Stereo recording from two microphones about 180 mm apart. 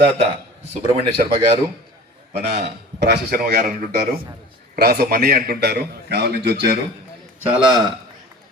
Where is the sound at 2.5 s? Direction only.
65° right (ahead or behind); by 3.8 s 50° right (ahead or behind).